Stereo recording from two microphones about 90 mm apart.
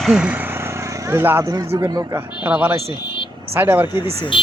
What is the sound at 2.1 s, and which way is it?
Speech, 20° right (ahead or behind).